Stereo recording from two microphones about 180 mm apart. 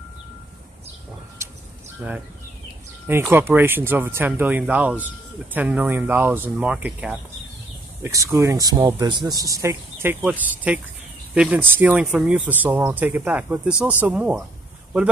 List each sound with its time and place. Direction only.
2.0 s speech: 5° right (ahead or behind)